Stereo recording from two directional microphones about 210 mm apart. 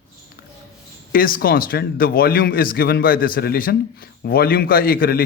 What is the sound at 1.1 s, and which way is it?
A man's voice, 45° left (ahead or behind).